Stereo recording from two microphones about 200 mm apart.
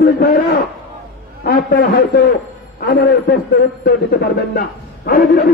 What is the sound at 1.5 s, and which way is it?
A man's voice, 45° left (ahead or behind).